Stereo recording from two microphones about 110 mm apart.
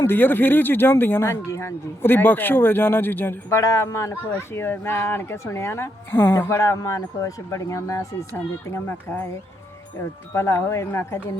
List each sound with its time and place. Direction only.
0.1 s speech: 20° left (ahead or behind)
10.3 s speech: 25° left (ahead or behind)